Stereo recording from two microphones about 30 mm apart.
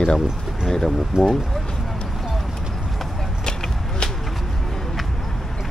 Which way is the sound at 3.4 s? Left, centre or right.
Left.